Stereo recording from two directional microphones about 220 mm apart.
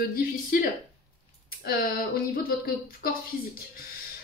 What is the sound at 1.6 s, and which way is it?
Speech, 40° left (ahead or behind).